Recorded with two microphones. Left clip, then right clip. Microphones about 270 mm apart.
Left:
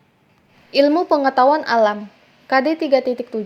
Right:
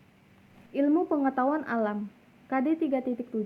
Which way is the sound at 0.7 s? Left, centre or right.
Centre.